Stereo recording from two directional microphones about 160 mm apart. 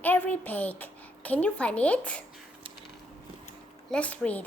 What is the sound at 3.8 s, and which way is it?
Speech, 5° left (ahead or behind).